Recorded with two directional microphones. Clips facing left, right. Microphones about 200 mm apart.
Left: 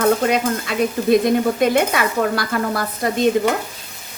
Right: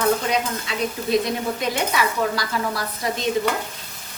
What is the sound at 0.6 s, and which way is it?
Stir, 55° left (ahead or behind).